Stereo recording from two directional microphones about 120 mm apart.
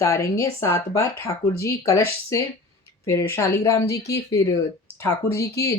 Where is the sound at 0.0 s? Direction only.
25° left (ahead or behind).